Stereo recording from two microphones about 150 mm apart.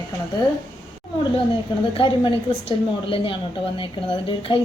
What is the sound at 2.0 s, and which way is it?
A woman's voice, 35° left (ahead or behind).